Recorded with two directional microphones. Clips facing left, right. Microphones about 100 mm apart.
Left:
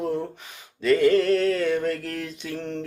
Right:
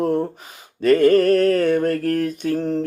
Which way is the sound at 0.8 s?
50° right (ahead or behind).